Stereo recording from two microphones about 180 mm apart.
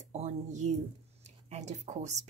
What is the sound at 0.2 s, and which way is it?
Speech, 40° right (ahead or behind).